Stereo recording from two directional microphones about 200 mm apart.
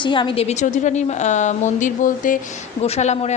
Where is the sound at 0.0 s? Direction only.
25° left (ahead or behind).